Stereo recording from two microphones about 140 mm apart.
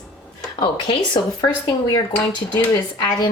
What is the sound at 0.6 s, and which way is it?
Speech, 30° left (ahead or behind).